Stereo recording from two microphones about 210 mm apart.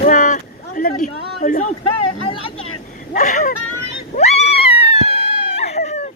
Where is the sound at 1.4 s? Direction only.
35° left (ahead or behind).